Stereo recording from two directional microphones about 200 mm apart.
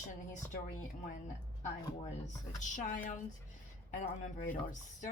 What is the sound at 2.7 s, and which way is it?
Speech, 40° left (ahead or behind).